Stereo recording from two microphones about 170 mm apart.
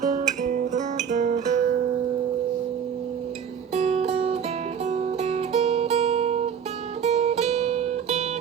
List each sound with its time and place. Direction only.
0.0 s music: 45° right (ahead or behind)
3.8 s music: 40° right (ahead or behind)